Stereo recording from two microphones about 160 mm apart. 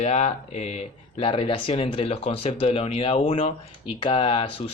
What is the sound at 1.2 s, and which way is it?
Speech, 35° left (ahead or behind).